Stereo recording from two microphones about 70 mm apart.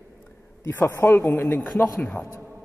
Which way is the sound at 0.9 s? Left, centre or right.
Left.